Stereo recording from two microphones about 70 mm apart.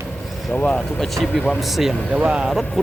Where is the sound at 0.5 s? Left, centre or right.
Centre.